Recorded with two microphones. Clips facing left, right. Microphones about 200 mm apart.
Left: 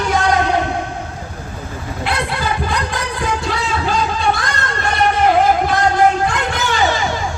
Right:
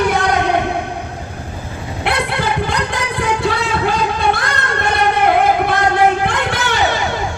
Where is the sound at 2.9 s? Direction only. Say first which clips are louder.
Right 2 dB; 60° right (ahead or behind).